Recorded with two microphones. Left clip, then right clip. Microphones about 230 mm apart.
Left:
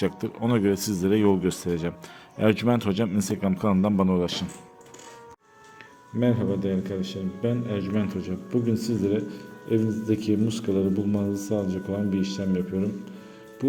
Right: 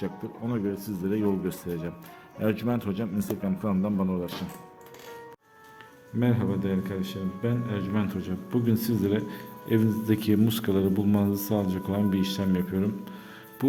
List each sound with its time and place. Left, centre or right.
0.0 s a man's voice: left
6.1 s a man's voice: centre